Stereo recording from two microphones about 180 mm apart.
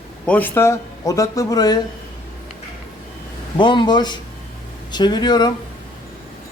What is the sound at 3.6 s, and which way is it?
A man's voice, 25° left (ahead or behind).